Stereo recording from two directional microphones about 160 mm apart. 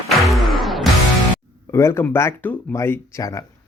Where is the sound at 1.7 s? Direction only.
15° left (ahead or behind).